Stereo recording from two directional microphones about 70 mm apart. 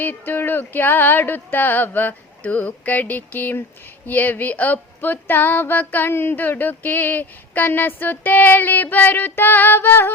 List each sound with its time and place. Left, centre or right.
0.0 s speech: left